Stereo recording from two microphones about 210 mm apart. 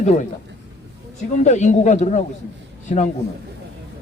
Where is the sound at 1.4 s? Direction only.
35° left (ahead or behind).